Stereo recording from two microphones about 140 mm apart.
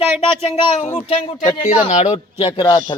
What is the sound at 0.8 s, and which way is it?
Speech, 55° left (ahead or behind).